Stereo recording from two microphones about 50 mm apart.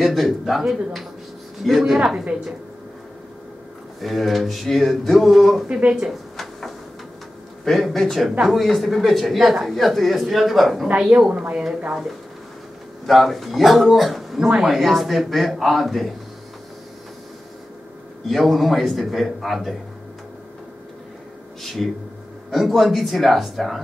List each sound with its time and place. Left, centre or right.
0.0 s a man's voice: centre
4.0 s a man's voice: centre
5.7 s speech: right
6.3 s a sound: centre
7.6 s a man's voice: centre
18.3 s a man's voice: centre
21.6 s a man's voice: centre